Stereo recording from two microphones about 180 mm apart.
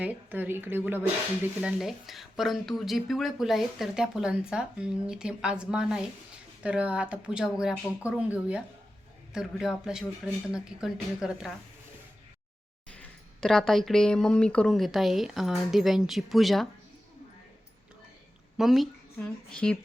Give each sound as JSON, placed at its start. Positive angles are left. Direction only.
{"t": 0.0, "sound": "speech", "side_deg": -10}
{"t": 1.6, "sound": "a woman's voice", "side_deg": 0}
{"t": 9.3, "sound": "a woman's voice", "side_deg": 0}
{"t": 13.0, "sound": "a woman's voice", "side_deg": 5}
{"t": 18.5, "sound": "speech", "side_deg": 0}